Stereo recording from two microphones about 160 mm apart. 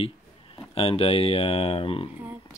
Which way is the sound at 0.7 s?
35° left (ahead or behind).